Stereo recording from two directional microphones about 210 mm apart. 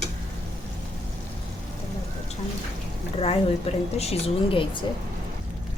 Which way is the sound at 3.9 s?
30° left (ahead or behind).